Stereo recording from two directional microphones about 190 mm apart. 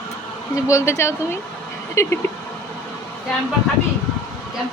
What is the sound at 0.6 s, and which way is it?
Speech, 15° left (ahead or behind).